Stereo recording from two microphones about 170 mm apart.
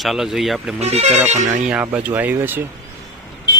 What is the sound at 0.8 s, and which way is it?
Speech, 40° right (ahead or behind).